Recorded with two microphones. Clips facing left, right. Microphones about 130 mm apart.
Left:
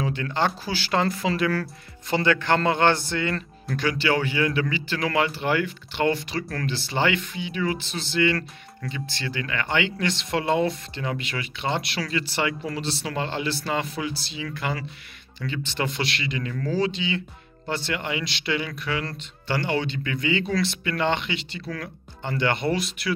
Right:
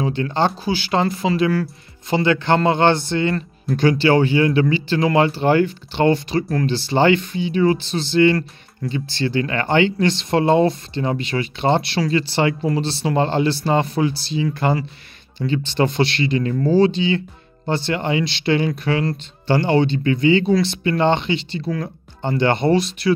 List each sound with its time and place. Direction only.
0.0 s speech: 25° right (ahead or behind)